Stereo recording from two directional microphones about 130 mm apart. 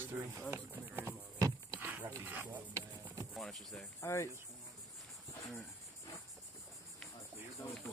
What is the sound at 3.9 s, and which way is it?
Speech, 20° left (ahead or behind).